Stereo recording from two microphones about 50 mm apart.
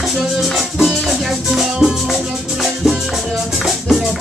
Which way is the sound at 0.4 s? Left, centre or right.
Centre.